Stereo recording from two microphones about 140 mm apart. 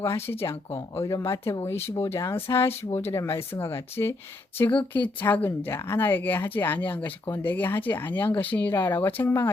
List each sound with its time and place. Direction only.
0.0 s speech: 20° left (ahead or behind)